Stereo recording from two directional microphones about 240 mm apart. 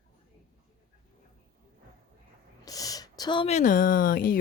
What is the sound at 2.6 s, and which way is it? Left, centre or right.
Speech, centre.